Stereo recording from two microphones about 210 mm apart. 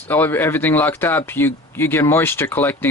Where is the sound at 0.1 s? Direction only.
10° left (ahead or behind).